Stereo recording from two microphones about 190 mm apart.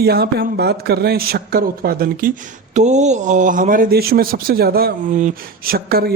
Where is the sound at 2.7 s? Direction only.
40° right (ahead or behind).